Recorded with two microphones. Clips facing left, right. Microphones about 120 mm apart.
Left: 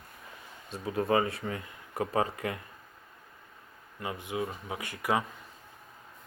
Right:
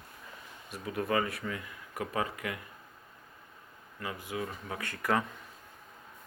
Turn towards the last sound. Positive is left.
turn(degrees=15)  # may be behind; listen again after turning